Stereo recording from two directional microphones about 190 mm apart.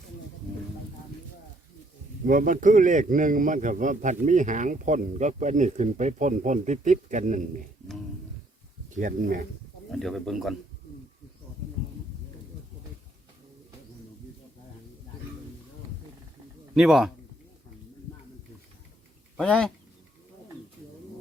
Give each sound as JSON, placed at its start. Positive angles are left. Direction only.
{"t": 2.2, "sound": "a man's voice", "side_deg": -45}
{"t": 8.9, "sound": "speech", "side_deg": -45}
{"t": 9.9, "sound": "a man's voice", "side_deg": 0}
{"t": 16.7, "sound": "a man's voice", "side_deg": 0}
{"t": 19.4, "sound": "a man's voice", "side_deg": 5}